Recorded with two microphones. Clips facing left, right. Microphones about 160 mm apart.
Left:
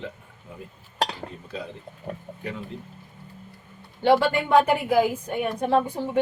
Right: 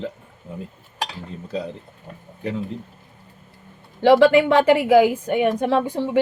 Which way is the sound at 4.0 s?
90° right.